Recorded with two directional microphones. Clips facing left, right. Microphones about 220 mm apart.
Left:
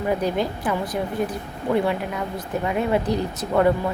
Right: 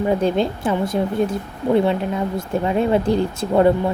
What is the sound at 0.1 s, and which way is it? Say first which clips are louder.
Speech: right 2 dB; 25° right (ahead or behind).